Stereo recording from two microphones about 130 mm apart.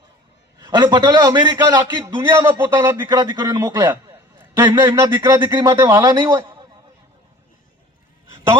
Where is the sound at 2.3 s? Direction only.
20° right (ahead or behind).